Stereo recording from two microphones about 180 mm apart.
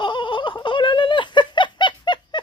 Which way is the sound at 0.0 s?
25° left (ahead or behind).